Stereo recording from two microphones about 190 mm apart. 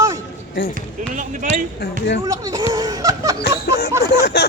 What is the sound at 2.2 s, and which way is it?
Speech, 20° right (ahead or behind).